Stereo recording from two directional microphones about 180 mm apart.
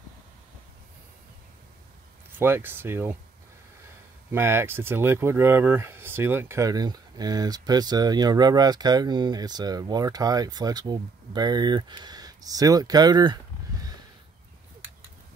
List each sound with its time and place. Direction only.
2.3 s speech: 10° right (ahead or behind)
4.3 s speech: 15° right (ahead or behind)